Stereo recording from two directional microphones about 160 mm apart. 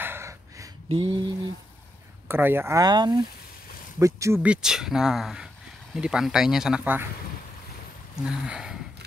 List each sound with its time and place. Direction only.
0.0 s a sound: 15° right (ahead or behind)
0.8 s speech: 30° right (ahead or behind)
2.2 s speech: 15° right (ahead or behind)
8.2 s speech: 5° right (ahead or behind)